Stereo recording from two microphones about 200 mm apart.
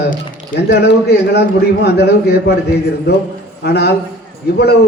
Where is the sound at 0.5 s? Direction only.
55° left (ahead or behind).